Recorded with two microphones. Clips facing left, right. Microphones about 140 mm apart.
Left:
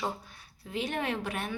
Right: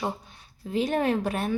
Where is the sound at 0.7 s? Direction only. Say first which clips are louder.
Right 8 dB; 35° right (ahead or behind).